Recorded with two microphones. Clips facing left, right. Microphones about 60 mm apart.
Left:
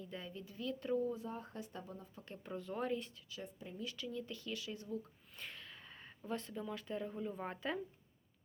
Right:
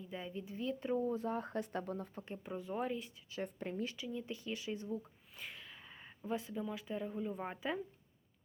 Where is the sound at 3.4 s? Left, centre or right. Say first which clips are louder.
Right 7 dB; right.